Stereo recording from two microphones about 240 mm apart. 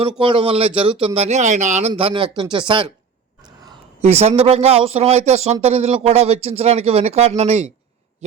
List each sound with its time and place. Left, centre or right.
0.2 s speech: right